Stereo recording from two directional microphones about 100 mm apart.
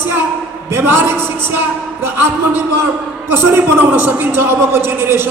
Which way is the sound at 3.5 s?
20° right (ahead or behind).